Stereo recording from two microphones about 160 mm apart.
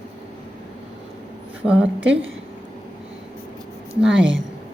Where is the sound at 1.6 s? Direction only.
5° right (ahead or behind).